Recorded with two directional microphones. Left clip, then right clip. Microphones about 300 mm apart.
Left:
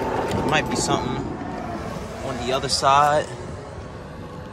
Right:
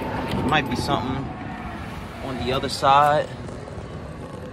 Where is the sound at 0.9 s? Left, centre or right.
Centre.